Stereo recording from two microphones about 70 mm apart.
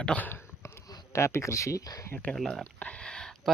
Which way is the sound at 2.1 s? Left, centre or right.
Left.